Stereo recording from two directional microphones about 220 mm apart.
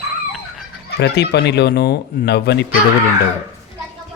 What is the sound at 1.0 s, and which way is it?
Speech, 50° left (ahead or behind).